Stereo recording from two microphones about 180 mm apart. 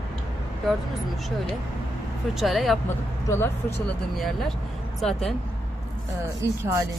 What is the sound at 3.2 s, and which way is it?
Speech, 15° left (ahead or behind).